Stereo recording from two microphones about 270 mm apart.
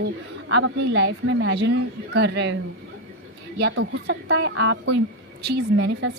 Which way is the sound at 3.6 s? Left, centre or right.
Right.